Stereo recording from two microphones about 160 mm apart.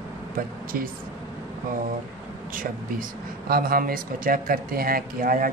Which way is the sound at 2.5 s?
65° right (ahead or behind).